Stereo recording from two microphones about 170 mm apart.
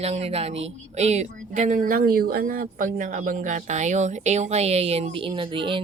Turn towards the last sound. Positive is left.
turn(degrees=-30)  # may be behind; listen again after turning